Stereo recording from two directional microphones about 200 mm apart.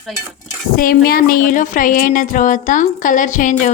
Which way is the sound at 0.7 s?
45° left (ahead or behind).